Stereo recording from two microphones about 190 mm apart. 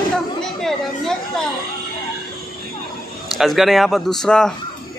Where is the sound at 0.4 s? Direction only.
Centre (ahead or behind).